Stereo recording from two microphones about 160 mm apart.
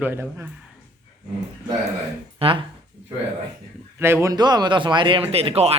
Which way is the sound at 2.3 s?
35° right (ahead or behind).